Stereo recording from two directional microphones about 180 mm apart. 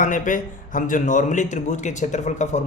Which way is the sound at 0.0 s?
45° left (ahead or behind).